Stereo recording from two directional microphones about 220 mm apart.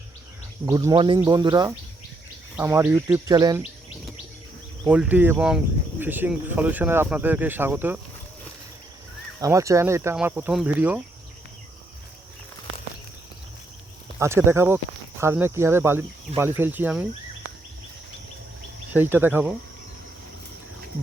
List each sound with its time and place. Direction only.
0.6 s speech: 15° right (ahead or behind)
4.9 s speech: 5° right (ahead or behind)
9.4 s speech: 15° right (ahead or behind)
14.2 s speech: 10° right (ahead or behind)
18.9 s speech: 10° right (ahead or behind)